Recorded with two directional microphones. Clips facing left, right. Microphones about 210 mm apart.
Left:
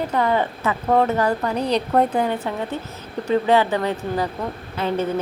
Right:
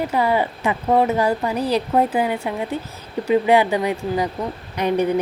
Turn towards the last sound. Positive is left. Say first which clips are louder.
# right 3 dB
turn(degrees=-15)  # may be behind; listen again after turning